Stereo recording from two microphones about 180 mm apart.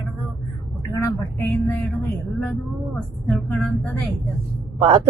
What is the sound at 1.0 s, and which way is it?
Speech, 15° left (ahead or behind).